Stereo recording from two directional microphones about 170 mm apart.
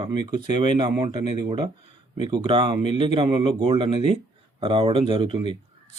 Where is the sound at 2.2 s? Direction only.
25° right (ahead or behind).